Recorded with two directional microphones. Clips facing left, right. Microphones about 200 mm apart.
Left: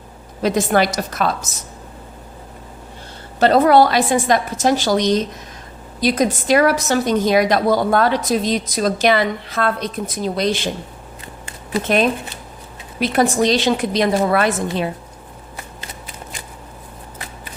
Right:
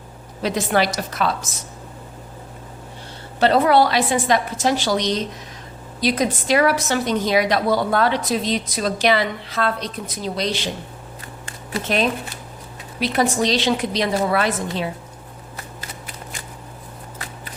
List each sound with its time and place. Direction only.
0.4 s a woman's voice: 45° left (ahead or behind)
3.4 s a woman's voice: 45° left (ahead or behind)
13.0 s a woman's voice: 50° left (ahead or behind)